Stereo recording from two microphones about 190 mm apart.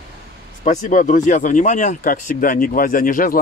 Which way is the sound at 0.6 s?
40° left (ahead or behind).